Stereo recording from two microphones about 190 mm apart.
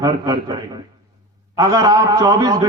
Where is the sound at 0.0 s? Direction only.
20° right (ahead or behind).